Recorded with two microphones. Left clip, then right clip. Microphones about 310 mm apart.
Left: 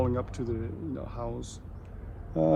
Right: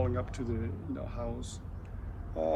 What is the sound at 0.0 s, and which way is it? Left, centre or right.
Speech, centre.